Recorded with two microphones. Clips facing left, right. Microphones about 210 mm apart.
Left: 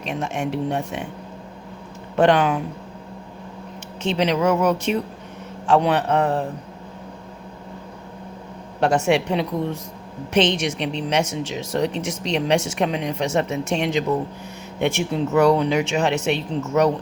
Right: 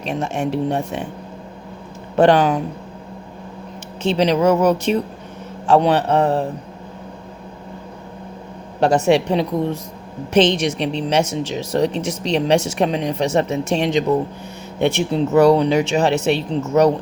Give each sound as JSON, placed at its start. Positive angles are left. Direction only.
{"t": 0.1, "sound": "speech", "side_deg": -35}
{"t": 2.1, "sound": "speech", "side_deg": -35}
{"t": 4.0, "sound": "speech", "side_deg": -35}
{"t": 8.8, "sound": "speech", "side_deg": -35}